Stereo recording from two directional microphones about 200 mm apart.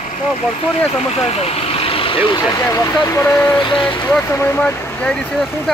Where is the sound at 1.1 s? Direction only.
30° left (ahead or behind).